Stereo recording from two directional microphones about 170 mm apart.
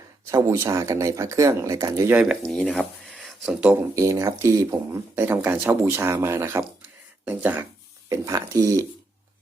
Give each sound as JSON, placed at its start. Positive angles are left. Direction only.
{"t": 0.3, "sound": "speech", "side_deg": -20}
{"t": 2.4, "sound": "speech", "side_deg": 5}